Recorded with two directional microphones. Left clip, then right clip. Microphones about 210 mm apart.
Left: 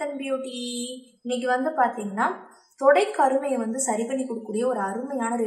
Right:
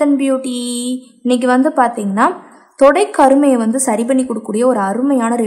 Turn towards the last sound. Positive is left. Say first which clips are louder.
# right 12 dB
turn(degrees=-50)  # may be behind; listen again after turning